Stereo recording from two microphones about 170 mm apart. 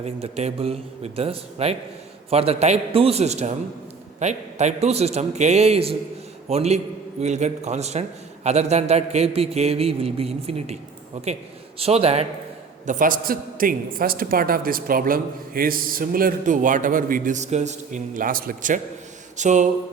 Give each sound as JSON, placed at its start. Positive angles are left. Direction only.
{"t": 0.0, "sound": "a man's voice", "side_deg": -40}
{"t": 11.8, "sound": "a man's voice", "side_deg": -35}
{"t": 12.8, "sound": "a woman's voice", "side_deg": -50}
{"t": 19.4, "sound": "a sound", "side_deg": -45}